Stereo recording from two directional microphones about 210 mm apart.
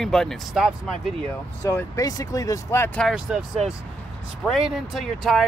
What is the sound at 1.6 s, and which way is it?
Speech, 10° left (ahead or behind).